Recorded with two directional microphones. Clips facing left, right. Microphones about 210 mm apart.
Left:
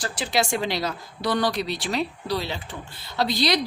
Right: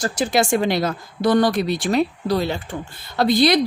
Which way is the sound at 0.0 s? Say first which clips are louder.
Right 6 dB; 45° right (ahead or behind).